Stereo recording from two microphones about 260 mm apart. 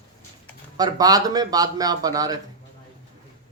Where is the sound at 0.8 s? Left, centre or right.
Centre.